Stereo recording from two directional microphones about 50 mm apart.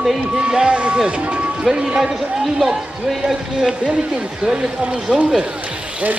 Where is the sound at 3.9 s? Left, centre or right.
Centre.